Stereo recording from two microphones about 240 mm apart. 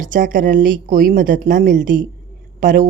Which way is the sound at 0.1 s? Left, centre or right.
Right.